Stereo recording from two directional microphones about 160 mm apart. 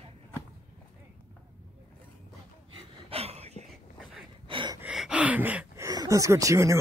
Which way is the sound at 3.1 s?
40° right (ahead or behind).